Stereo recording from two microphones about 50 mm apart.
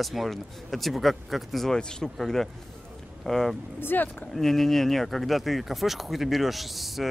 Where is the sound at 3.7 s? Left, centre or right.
Left.